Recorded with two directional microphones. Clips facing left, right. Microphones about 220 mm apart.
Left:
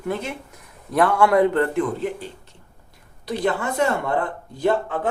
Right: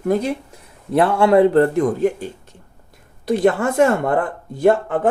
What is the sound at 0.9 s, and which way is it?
Speech, 25° right (ahead or behind).